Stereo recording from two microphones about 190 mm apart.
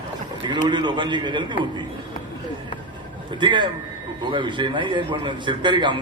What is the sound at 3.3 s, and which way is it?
A man's voice, 25° right (ahead or behind).